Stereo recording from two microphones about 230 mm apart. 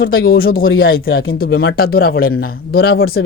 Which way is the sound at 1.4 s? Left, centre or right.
Left.